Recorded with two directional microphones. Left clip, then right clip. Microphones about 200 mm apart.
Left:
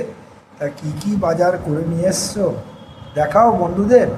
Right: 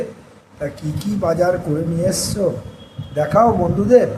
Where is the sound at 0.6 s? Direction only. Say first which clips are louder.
Left 1 dB; centre (ahead or behind).